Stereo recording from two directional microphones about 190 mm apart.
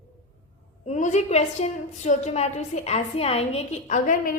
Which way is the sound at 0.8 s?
40° left (ahead or behind).